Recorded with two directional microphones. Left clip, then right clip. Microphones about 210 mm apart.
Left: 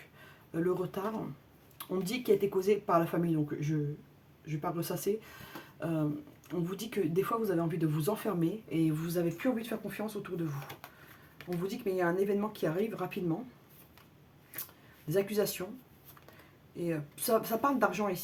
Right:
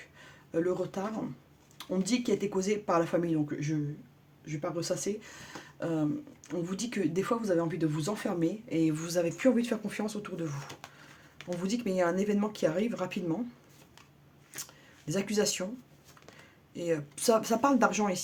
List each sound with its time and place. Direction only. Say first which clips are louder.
0.5 s speech: right 2 dB; 30° right (ahead or behind); by 10.5 s 45° right (ahead or behind)
11.6 s speech: right 2 dB; 40° right (ahead or behind)
15.1 s speech: right 1 dB; 40° right (ahead or behind)
16.7 s speech: right 4 dB; 45° right (ahead or behind)